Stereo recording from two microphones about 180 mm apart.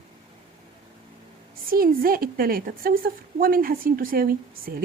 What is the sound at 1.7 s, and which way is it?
A woman's voice, 55° right (ahead or behind).